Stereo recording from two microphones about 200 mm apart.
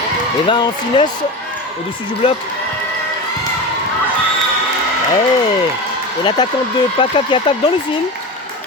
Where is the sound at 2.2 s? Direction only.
25° left (ahead or behind).